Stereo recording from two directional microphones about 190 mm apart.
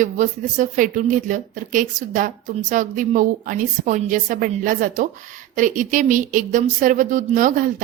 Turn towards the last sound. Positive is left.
turn(degrees=-45)  # may be behind; listen again after turning